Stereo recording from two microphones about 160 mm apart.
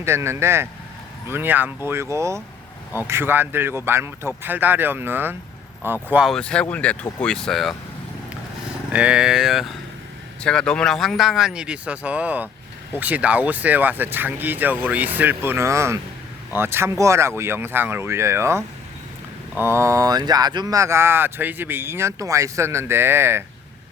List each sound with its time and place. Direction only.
0.0 s speech: 15° right (ahead or behind)
6.2 s speech: 5° left (ahead or behind)
8.9 s speech: 5° right (ahead or behind)